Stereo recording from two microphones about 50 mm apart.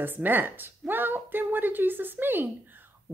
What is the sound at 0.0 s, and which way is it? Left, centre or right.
Speech, right.